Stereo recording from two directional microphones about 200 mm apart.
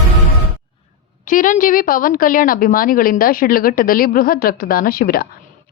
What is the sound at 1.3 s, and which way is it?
A woman's voice, 40° left (ahead or behind).